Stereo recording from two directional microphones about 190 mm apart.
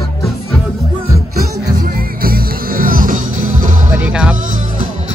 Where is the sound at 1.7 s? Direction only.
50° right (ahead or behind).